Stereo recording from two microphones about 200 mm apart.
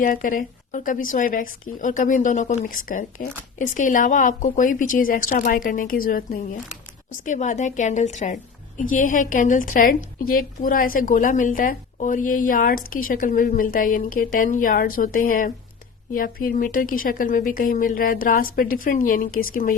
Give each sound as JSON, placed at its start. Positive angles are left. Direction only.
{"t": 0.0, "sound": "a woman's voice", "side_deg": 40}